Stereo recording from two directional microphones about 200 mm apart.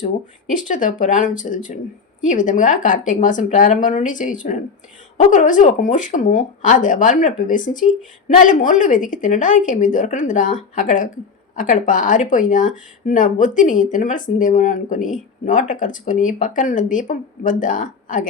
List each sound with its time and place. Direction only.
0.5 s speech: 40° left (ahead or behind)